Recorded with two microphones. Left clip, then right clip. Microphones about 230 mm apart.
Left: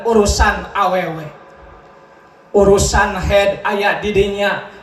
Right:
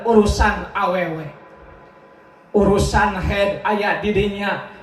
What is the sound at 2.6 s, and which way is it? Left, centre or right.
A man's voice, left.